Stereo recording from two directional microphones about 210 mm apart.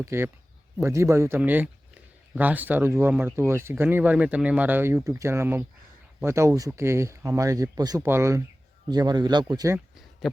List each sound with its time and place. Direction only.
0.0 s speech: 10° right (ahead or behind)